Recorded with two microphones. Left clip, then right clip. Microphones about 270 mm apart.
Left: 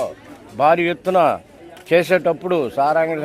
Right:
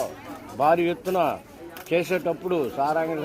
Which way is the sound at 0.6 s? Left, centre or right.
Left.